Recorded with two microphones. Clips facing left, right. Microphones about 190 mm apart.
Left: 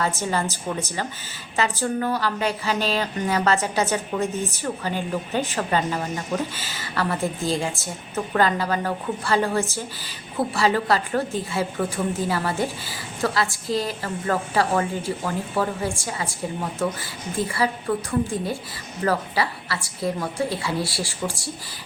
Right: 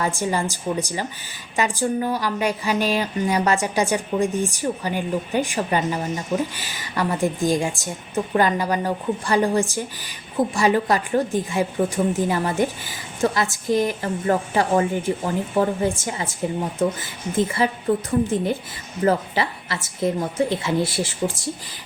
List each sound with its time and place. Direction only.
0.0 s a woman's voice: 15° right (ahead or behind)